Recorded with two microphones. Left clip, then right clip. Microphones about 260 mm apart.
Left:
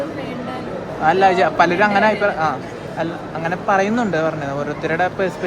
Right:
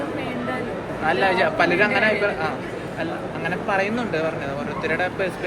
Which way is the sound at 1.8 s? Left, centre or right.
Left.